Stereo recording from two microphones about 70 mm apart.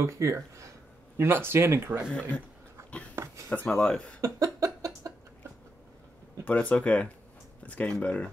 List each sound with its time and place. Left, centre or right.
0.0 s speech: right
2.1 s speech: centre
3.2 s a sound: right
3.6 s speech: centre
4.2 s a sound: right
6.4 s speech: centre